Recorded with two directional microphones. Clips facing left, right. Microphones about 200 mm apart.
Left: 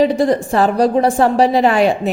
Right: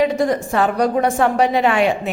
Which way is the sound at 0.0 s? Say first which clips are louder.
Left 3 dB; 35° left (ahead or behind).